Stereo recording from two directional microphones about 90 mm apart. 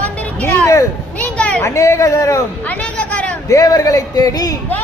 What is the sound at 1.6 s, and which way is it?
Speech, 35° left (ahead or behind).